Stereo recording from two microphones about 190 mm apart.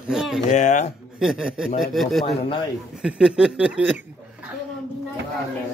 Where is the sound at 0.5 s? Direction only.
40° left (ahead or behind).